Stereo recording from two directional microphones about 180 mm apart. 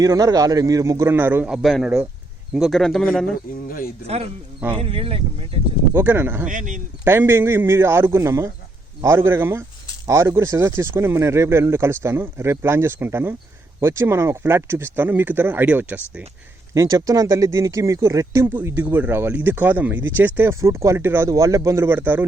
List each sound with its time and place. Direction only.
0.0 s a man's voice: 20° right (ahead or behind); by 3.3 s 5° left (ahead or behind)
3.7 s speech: 55° left (ahead or behind)
4.0 s speech: 35° right (ahead or behind)
5.9 s speech: 10° right (ahead or behind)
6.5 s speech: 45° right (ahead or behind)
7.0 s speech: 10° right (ahead or behind)